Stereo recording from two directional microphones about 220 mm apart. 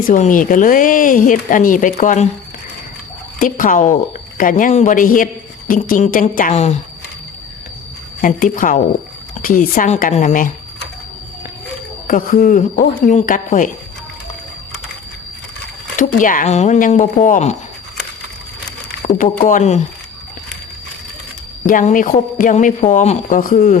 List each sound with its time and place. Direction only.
0.0 s a woman's voice: 35° left (ahead or behind)
3.3 s a woman's voice: 40° left (ahead or behind)
8.2 s a woman's voice: 40° left (ahead or behind)
12.0 s a woman's voice: 40° left (ahead or behind)
16.1 s a woman's voice: 35° left (ahead or behind)
19.0 s a woman's voice: 40° left (ahead or behind)
21.7 s a woman's voice: 35° left (ahead or behind)